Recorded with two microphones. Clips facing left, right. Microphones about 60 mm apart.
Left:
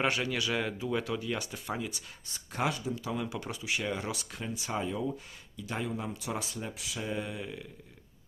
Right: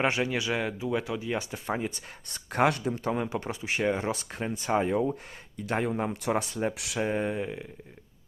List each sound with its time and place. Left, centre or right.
0.0 s speech: right
1.6 s speech: right
2.3 s speech: right
2.9 s speech: right
7.0 s speech: right